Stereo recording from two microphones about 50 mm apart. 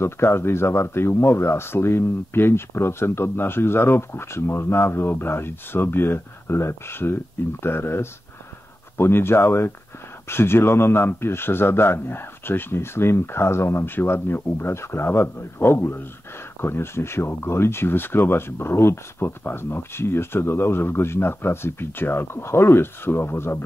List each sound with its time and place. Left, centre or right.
0.0 s speech: left